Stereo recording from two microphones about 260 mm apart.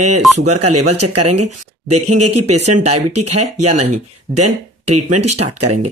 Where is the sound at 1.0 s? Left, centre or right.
Right.